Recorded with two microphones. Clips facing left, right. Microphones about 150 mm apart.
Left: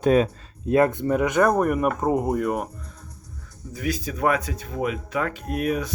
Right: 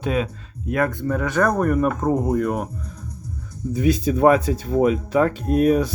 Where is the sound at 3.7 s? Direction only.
25° right (ahead or behind).